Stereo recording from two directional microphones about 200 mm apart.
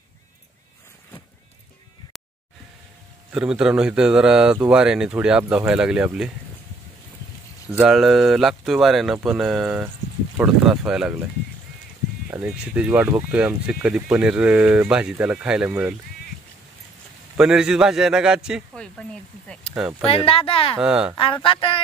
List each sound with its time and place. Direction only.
3.3 s speech: 5° right (ahead or behind)
7.7 s speech: 5° right (ahead or behind)
12.3 s speech: 5° right (ahead or behind)
17.4 s speech: 5° right (ahead or behind)
20.1 s speech: 30° left (ahead or behind)
20.8 s speech: 5° right (ahead or behind)
21.2 s speech: 25° left (ahead or behind)